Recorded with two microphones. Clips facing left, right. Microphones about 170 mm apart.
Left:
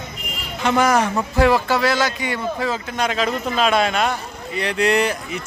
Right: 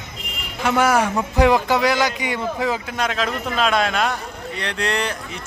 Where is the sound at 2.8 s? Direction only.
Centre (ahead or behind).